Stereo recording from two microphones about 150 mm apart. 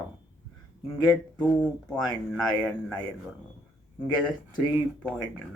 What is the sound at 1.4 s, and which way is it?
Speech, 5° left (ahead or behind).